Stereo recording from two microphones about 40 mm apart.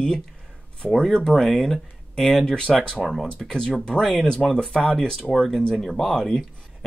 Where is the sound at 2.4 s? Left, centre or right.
Left.